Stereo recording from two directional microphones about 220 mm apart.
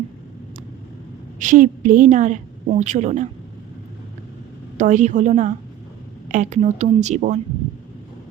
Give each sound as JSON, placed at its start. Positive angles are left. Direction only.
{"t": 1.4, "sound": "a woman's voice", "side_deg": -35}
{"t": 4.8, "sound": "a woman's voice", "side_deg": -35}